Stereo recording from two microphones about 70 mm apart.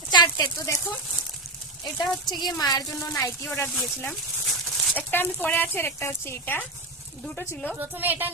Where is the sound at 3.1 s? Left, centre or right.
Left.